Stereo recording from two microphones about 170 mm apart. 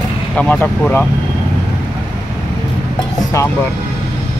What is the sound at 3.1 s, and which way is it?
Speech, 15° left (ahead or behind).